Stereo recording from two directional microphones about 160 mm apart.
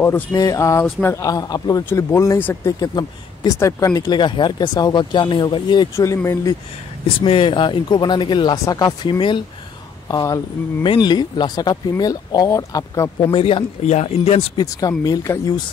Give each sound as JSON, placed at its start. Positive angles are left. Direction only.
{"t": 0.0, "sound": "a man's voice", "side_deg": 15}
{"t": 7.2, "sound": "speech", "side_deg": 35}
{"t": 13.3, "sound": "speech", "side_deg": 35}
{"t": 14.6, "sound": "speech", "side_deg": 20}